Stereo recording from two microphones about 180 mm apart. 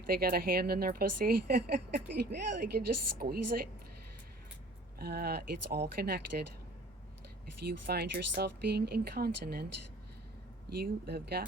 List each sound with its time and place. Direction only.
0.1 s speech: 55° right (ahead or behind)
4.9 s speech: 60° right (ahead or behind)
7.7 s speech: 60° right (ahead or behind)
10.7 s speech: 60° right (ahead or behind)